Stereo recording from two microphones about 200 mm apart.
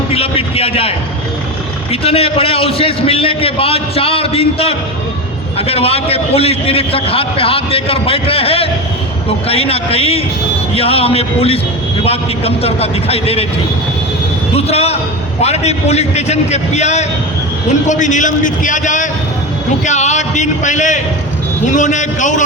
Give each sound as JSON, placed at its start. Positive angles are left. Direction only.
{"t": 0.1, "sound": "a man's voice", "side_deg": 30}
{"t": 14.5, "sound": "a man's voice", "side_deg": 30}